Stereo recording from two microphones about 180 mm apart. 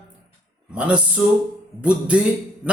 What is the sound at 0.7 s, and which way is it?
Speech, 5° right (ahead or behind).